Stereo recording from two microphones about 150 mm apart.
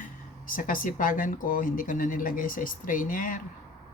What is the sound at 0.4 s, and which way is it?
Speech, 65° left (ahead or behind).